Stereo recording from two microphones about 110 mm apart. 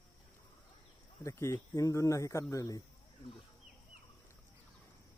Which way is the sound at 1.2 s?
25° left (ahead or behind).